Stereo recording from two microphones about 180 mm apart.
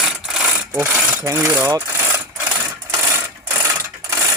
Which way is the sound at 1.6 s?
15° right (ahead or behind).